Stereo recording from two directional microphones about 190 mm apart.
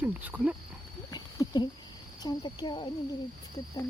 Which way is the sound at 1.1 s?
20° left (ahead or behind).